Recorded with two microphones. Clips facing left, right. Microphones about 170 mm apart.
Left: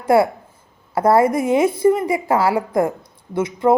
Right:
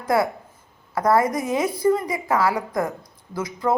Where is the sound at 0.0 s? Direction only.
30° left (ahead or behind).